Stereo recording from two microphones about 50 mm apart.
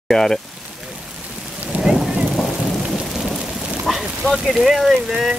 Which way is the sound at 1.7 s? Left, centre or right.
Right.